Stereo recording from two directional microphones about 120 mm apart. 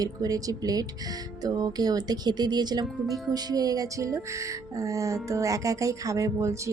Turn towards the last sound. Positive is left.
turn(degrees=-25)  # may be behind; listen again after turning